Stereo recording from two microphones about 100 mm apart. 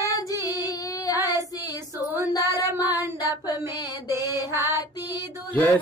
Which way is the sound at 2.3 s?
40° left (ahead or behind).